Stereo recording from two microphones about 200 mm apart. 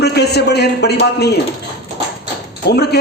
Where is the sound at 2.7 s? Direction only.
55° left (ahead or behind).